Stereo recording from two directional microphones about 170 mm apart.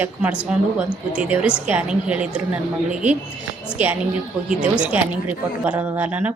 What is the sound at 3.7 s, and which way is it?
A woman's voice, 10° right (ahead or behind).